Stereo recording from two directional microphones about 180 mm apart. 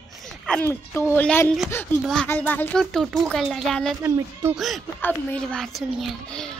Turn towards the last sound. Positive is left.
turn(degrees=5)  # may be behind; listen again after turning